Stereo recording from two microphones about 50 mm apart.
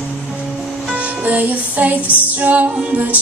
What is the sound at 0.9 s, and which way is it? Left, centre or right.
Music, right.